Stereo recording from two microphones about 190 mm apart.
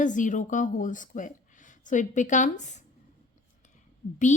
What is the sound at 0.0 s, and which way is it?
Speech, 40° left (ahead or behind).